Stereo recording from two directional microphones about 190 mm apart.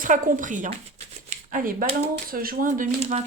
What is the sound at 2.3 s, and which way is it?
Speech, 50° right (ahead or behind).